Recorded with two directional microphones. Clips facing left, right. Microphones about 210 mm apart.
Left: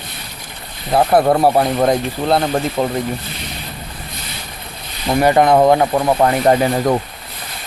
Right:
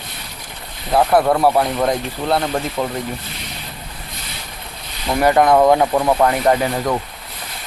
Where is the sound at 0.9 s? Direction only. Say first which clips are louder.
Left 2 dB; 25° left (ahead or behind).